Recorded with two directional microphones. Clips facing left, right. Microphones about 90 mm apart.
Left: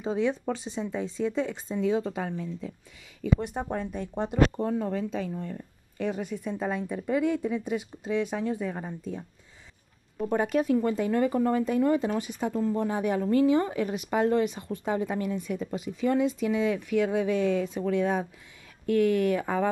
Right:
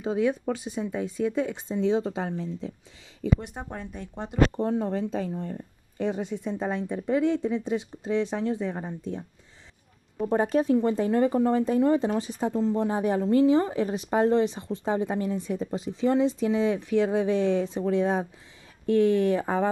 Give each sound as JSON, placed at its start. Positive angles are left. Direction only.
{"t": 0.0, "sound": "a woman's voice", "side_deg": -10}
{"t": 1.7, "sound": "a woman's voice", "side_deg": -25}
{"t": 4.6, "sound": "a woman's voice", "side_deg": -25}
{"t": 10.2, "sound": "a woman's voice", "side_deg": -30}